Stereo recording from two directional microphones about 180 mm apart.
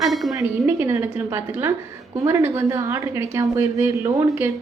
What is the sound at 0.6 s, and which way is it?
A woman's voice, 15° right (ahead or behind).